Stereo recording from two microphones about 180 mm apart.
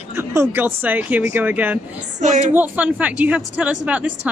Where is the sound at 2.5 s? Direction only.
10° right (ahead or behind).